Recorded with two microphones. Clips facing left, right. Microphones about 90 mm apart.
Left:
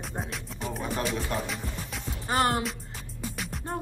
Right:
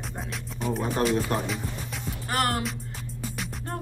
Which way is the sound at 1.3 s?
40° right (ahead or behind).